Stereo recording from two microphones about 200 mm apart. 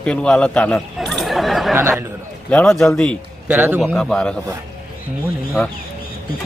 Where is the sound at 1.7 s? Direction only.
15° right (ahead or behind).